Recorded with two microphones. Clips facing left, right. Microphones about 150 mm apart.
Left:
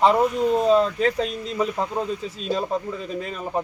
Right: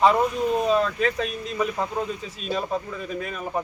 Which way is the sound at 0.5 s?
25° left (ahead or behind).